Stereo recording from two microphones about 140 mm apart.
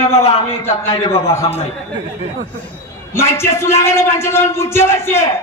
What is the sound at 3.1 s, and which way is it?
A man's voice, 20° left (ahead or behind).